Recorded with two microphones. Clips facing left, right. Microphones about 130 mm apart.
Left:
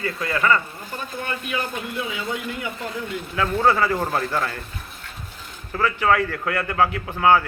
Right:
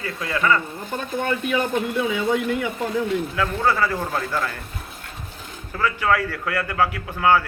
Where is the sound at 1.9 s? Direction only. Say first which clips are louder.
Right 6 dB; 50° right (ahead or behind).